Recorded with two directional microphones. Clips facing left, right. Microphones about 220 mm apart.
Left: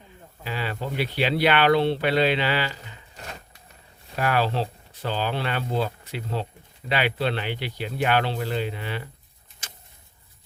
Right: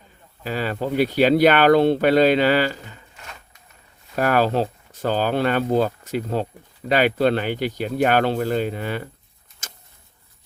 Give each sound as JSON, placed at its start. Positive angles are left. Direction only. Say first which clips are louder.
{"t": 0.4, "sound": "speech", "louder": "right 6 dB", "side_deg": -45}
{"t": 4.1, "sound": "speech", "louder": "right 5 dB", "side_deg": -45}
{"t": 9.6, "sound": "vehicle", "louder": "right 3 dB", "side_deg": -45}